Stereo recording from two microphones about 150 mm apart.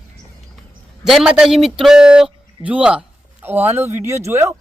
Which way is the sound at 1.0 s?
5° right (ahead or behind).